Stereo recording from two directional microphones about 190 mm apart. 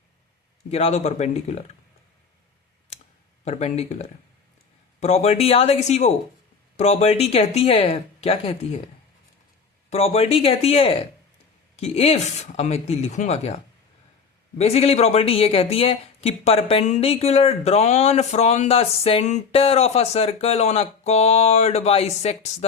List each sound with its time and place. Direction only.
0.7 s speech: 35° left (ahead or behind)
3.4 s speech: 35° left (ahead or behind)
9.9 s speech: 35° left (ahead or behind)
14.6 s speech: 35° left (ahead or behind)